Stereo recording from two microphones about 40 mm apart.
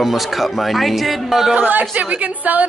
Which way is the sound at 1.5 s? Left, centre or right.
Right.